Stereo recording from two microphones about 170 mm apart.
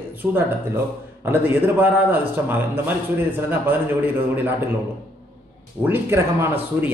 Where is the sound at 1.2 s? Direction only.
10° right (ahead or behind).